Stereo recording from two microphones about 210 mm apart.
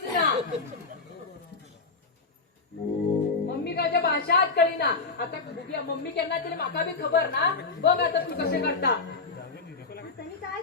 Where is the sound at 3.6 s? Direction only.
50° left (ahead or behind).